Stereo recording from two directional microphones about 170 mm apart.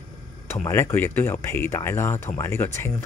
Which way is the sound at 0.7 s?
15° left (ahead or behind).